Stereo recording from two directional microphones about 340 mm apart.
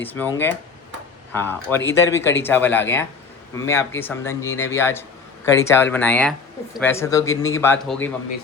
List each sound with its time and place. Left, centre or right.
0.0 s speech: centre